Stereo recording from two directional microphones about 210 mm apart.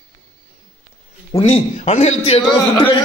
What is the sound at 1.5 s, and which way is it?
Speech, 35° left (ahead or behind).